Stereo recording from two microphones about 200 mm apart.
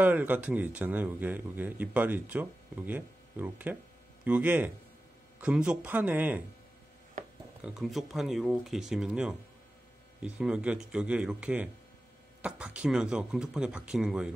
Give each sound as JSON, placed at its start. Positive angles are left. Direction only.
{"t": 0.0, "sound": "speech", "side_deg": -10}
{"t": 7.6, "sound": "speech", "side_deg": 0}